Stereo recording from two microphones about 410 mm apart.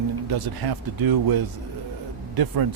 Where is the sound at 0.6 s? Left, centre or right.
Right.